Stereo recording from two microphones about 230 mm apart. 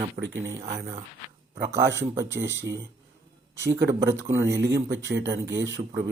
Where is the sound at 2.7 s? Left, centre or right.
Right.